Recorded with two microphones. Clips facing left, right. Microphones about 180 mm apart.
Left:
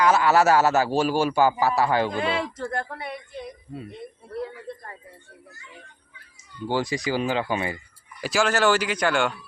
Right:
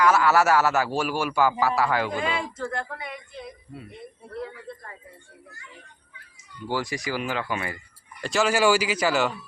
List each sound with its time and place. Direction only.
0.0 s a man's voice: 20° left (ahead or behind)
2.2 s speech: 35° left (ahead or behind)
6.7 s a man's voice: 25° left (ahead or behind)
8.2 s speech: 5° left (ahead or behind)
8.4 s speech: 10° right (ahead or behind)